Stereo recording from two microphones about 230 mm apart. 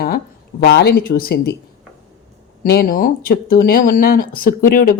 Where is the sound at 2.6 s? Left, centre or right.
Left.